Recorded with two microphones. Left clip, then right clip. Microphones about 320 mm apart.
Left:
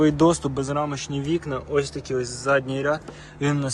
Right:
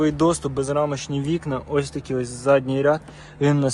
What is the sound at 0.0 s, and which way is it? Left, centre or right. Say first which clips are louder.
Speech: left 1 dB; centre.